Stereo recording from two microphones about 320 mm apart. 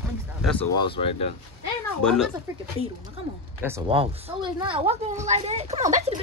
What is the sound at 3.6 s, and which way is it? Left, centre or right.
A woman's voice, centre.